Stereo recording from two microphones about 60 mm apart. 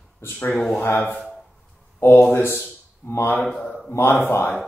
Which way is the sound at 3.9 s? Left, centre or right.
Left.